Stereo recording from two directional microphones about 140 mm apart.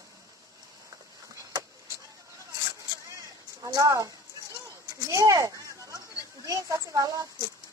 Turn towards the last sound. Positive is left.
turn(degrees=-25)  # may be behind; listen again after turning